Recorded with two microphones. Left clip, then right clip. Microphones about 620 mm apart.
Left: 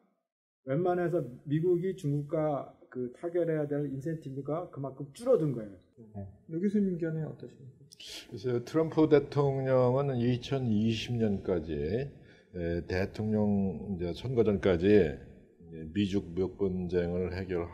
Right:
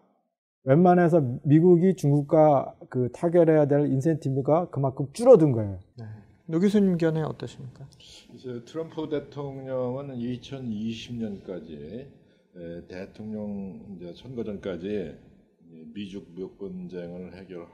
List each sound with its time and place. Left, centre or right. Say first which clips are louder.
0.7 s speech: right 10 dB; right
6.5 s speech: right 8 dB; right
8.0 s speech: left 5 dB; left